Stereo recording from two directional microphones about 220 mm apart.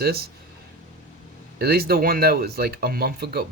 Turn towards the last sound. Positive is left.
turn(degrees=-45)  # may be behind; listen again after turning